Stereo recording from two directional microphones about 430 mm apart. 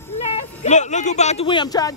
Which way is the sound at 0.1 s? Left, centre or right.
Centre.